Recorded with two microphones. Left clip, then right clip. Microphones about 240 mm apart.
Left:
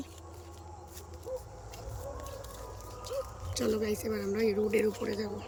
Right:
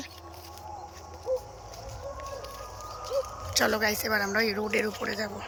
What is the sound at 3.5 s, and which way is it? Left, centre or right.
Speech, centre.